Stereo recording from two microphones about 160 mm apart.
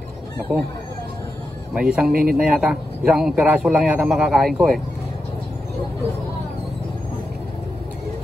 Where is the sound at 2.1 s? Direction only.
65° right (ahead or behind).